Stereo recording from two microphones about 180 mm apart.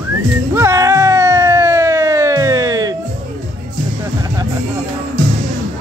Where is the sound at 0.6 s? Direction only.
15° right (ahead or behind).